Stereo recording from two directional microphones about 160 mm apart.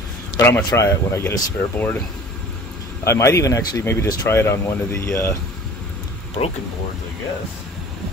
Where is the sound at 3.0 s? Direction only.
20° left (ahead or behind).